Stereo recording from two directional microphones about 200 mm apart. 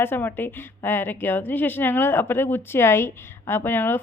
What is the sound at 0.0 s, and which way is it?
Speech, 10° left (ahead or behind).